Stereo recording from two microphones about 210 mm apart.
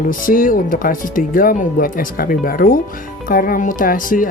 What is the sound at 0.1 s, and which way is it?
Speech, 40° left (ahead or behind).